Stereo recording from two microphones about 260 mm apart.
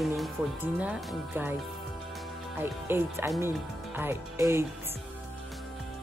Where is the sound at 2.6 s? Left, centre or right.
Centre.